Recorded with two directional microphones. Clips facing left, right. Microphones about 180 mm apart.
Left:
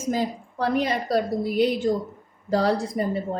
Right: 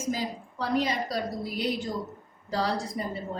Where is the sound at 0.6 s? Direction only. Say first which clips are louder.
Left 4 dB; 55° left (ahead or behind).